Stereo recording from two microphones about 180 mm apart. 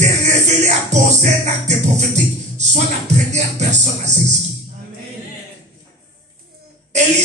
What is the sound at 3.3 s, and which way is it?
Music, 40° right (ahead or behind).